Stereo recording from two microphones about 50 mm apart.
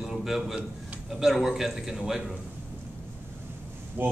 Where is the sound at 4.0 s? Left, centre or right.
Right.